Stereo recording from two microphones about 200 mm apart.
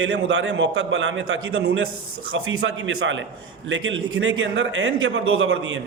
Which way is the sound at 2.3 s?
90° right.